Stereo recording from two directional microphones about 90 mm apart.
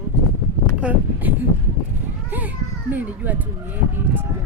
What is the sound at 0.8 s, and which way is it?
Speech, 15° right (ahead or behind).